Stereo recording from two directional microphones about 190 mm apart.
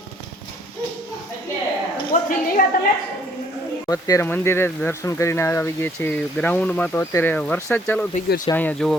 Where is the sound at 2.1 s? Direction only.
45° left (ahead or behind).